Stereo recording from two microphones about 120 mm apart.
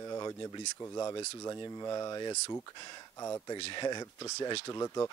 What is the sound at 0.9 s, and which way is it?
Speech, 25° left (ahead or behind).